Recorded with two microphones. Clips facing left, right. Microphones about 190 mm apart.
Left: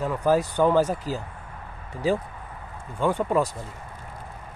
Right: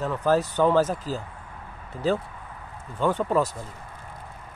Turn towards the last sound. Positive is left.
turn(degrees=10)  # may be behind; listen again after turning